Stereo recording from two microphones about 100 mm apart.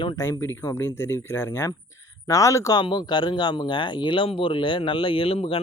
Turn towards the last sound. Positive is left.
turn(degrees=65)  # may be behind; listen again after turning